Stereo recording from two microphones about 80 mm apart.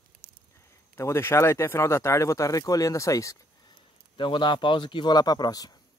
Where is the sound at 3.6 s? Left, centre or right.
Left.